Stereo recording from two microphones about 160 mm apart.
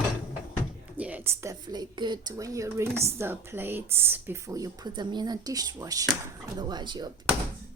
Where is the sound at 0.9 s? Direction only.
10° right (ahead or behind).